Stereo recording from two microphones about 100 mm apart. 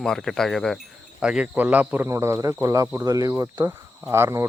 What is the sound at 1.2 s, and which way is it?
Speech, 10° right (ahead or behind).